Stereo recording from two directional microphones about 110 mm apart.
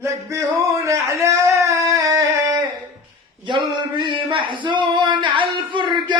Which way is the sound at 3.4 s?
45° right (ahead or behind).